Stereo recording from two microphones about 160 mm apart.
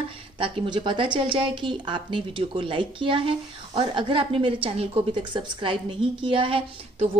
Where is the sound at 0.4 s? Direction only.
30° right (ahead or behind).